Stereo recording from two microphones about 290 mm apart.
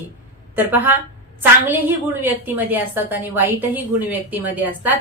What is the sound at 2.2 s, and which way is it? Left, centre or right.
A woman's voice, centre.